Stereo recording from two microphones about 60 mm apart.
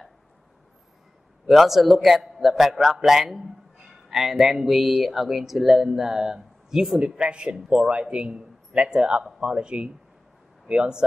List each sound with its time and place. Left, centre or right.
1.5 s speech: centre
7.2 s a man's voice: centre